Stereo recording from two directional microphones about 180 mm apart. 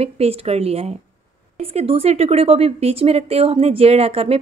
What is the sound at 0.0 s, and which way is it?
A woman's voice, 35° right (ahead or behind).